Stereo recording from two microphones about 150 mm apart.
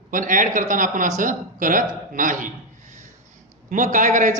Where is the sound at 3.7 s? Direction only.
55° right (ahead or behind).